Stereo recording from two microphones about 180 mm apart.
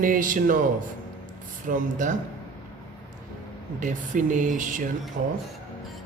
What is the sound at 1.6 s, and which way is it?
Speech, 45° right (ahead or behind).